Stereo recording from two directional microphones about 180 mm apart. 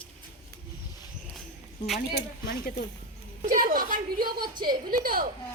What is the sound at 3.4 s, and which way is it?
Speech, 50° right (ahead or behind).